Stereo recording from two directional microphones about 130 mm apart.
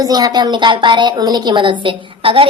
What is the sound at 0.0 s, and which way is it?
A woman's voice, 30° right (ahead or behind).